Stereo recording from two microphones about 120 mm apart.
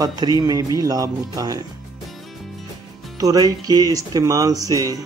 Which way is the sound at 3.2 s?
30° right (ahead or behind).